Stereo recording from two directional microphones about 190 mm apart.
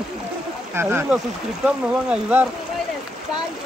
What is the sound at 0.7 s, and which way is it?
Speech, 10° right (ahead or behind).